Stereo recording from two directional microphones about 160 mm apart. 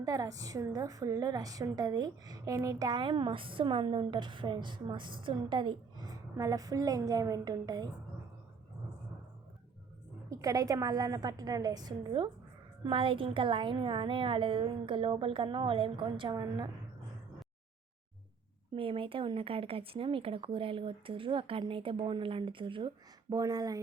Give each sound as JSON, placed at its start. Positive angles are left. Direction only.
{"t": 0.0, "sound": "a woman's voice", "side_deg": -20}
{"t": 10.2, "sound": "a woman's voice", "side_deg": -20}
{"t": 18.7, "sound": "a woman's voice", "side_deg": -35}